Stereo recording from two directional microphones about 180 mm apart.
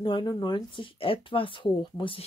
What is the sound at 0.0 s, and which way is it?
Speech, 25° left (ahead or behind).